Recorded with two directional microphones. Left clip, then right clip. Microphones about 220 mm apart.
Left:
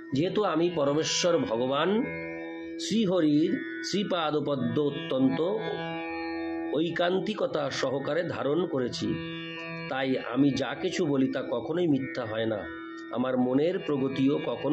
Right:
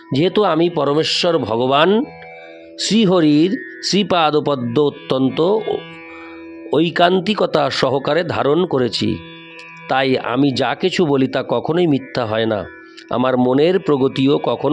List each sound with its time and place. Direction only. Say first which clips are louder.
0.1 s speech: right 12 dB; 50° right (ahead or behind)